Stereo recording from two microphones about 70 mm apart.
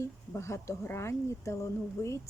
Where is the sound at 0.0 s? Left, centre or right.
Left.